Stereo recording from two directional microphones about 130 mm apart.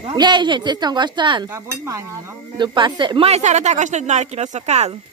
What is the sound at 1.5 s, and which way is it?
Dishes, 20° right (ahead or behind).